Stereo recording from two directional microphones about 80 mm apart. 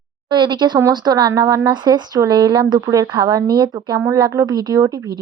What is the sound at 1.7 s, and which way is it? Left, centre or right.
Speech, right.